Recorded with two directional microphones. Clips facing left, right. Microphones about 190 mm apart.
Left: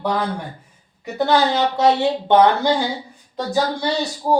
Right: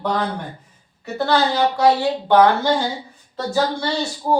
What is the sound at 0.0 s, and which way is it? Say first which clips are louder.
Speech: even; 10° left (ahead or behind).